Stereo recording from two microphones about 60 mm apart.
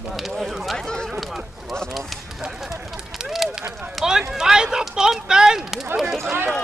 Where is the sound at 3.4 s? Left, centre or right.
Centre.